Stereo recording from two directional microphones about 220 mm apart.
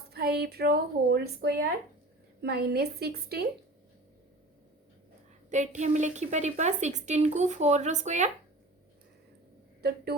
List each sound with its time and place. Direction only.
0.1 s a woman's voice: 45° right (ahead or behind)
5.5 s a woman's voice: 35° right (ahead or behind)
9.8 s a woman's voice: 45° right (ahead or behind)